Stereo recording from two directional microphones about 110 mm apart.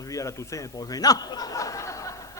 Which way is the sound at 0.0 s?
30° left (ahead or behind).